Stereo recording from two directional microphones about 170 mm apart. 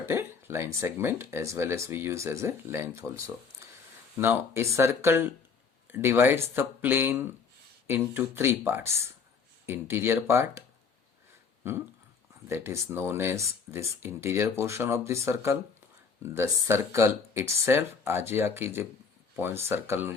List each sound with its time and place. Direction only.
0.0 s speech: 15° right (ahead or behind)
12.5 s speech: 15° right (ahead or behind)